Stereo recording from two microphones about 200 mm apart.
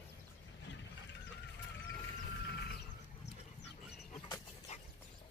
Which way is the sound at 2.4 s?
60° left (ahead or behind).